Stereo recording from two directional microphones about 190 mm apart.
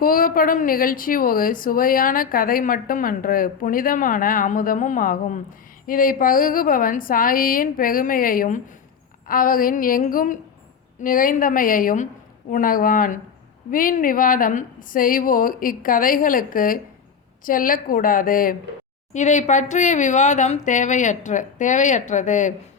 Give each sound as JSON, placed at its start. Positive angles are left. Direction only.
{"t": 0.0, "sound": "speech", "side_deg": 50}